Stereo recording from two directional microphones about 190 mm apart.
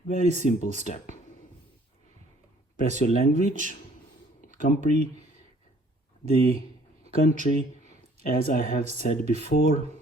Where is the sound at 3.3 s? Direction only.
40° right (ahead or behind).